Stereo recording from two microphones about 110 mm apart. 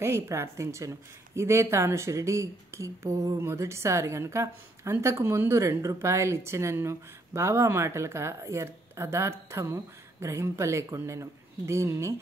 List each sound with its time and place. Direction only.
0.0 s speech: 25° right (ahead or behind)